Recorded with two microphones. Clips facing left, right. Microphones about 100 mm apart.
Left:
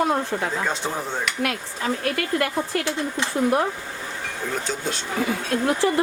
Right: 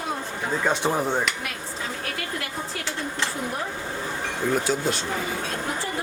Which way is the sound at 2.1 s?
55° left (ahead or behind).